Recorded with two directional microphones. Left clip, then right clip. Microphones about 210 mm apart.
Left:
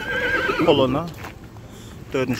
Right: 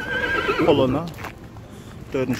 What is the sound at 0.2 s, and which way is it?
Neigh, 55° left (ahead or behind).